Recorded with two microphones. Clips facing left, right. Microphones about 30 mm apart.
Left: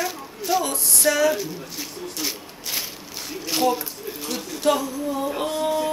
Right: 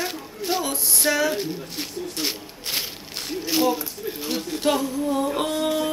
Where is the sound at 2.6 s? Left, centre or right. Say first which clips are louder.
Right 2 dB; right.